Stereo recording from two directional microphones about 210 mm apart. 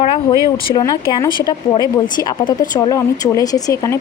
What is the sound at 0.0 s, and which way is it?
Speech, 25° left (ahead or behind).